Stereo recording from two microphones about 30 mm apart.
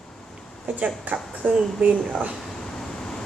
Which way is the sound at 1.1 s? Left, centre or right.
Right.